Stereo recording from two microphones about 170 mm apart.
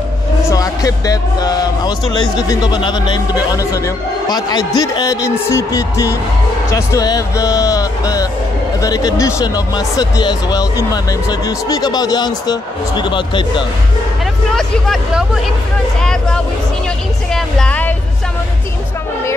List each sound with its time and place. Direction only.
0.5 s speech: 20° left (ahead or behind)
14.5 s speech: centre (ahead or behind)
17.3 s a sound: 5° left (ahead or behind)